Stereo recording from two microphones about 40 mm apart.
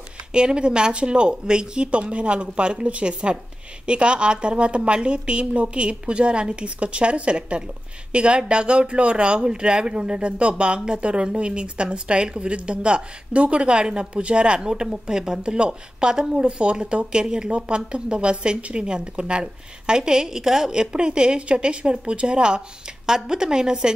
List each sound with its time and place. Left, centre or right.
0.3 s a woman's voice: right